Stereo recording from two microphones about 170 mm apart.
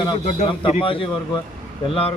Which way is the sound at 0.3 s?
45° left (ahead or behind).